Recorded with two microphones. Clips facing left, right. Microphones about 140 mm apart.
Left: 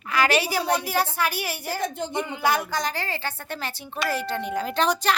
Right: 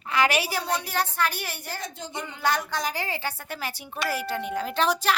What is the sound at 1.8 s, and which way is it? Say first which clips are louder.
Speech: left 8 dB; 55° left (ahead or behind).